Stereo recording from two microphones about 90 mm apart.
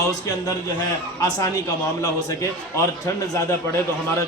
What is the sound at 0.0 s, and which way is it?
Speech, 40° left (ahead or behind).